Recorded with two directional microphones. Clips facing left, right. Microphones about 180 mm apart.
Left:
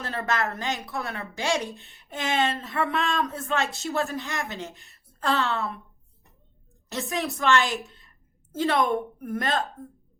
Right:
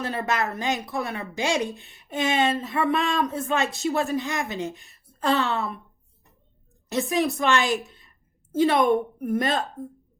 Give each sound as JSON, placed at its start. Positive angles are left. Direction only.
{"t": 0.0, "sound": "speech", "side_deg": -20}
{"t": 6.9, "sound": "speech", "side_deg": -15}